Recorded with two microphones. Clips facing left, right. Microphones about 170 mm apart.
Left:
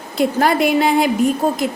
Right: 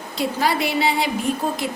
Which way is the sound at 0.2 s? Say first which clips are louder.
Left 6 dB; 50° left (ahead or behind).